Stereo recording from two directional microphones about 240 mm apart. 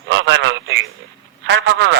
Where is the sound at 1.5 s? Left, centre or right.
Right.